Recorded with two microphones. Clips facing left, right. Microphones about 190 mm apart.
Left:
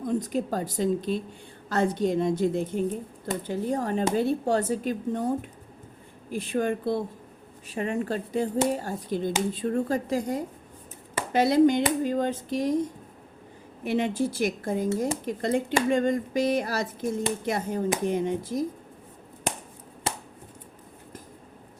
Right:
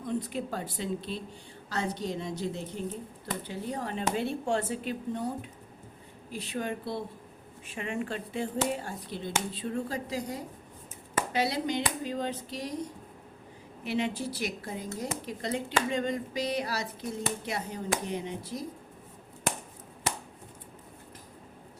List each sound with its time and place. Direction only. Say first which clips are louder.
0.0 s speech: left 6 dB; 45° left (ahead or behind)
13.8 s speech: left 5 dB; 50° left (ahead or behind)